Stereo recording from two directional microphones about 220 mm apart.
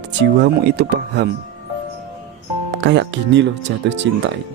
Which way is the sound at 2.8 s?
55° right (ahead or behind).